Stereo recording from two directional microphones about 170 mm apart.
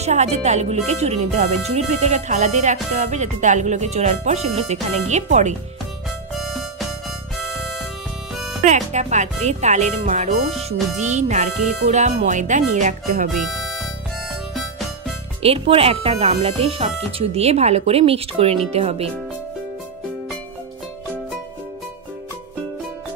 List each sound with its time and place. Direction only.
0.0 s speech: 40° right (ahead or behind)
6.4 s music: centre (ahead or behind)
8.6 s speech: 45° right (ahead or behind)
15.4 s speech: 35° right (ahead or behind)